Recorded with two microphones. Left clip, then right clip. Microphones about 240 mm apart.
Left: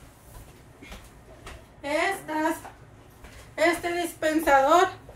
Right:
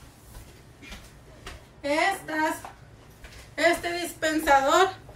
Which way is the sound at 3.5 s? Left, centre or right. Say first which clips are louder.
Even; centre.